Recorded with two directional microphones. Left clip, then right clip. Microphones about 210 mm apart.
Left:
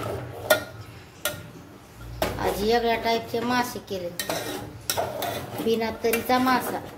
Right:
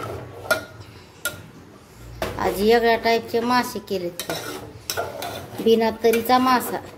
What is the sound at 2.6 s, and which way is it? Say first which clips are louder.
A child's voice: right 6 dB; 30° right (ahead or behind).